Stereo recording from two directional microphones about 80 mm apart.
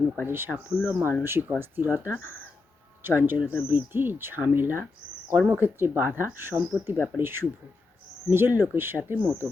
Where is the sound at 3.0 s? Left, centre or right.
Right.